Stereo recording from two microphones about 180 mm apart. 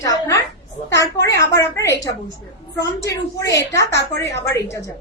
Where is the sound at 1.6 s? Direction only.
15° left (ahead or behind).